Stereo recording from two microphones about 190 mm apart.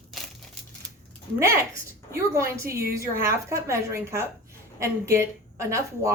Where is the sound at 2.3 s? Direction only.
15° right (ahead or behind).